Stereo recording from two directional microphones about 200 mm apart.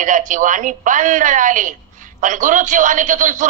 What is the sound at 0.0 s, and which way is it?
A woman's voice, 40° right (ahead or behind).